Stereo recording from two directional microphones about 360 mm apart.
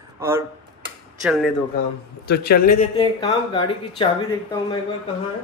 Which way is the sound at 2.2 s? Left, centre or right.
Left.